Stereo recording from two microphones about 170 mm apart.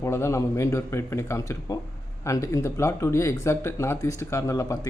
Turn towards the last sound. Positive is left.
turn(degrees=20)  # may be behind; listen again after turning